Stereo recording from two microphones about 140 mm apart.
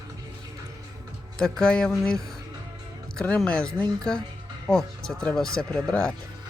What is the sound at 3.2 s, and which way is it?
Speech, 5° left (ahead or behind).